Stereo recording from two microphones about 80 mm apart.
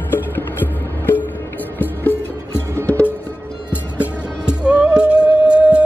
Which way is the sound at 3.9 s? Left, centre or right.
Centre.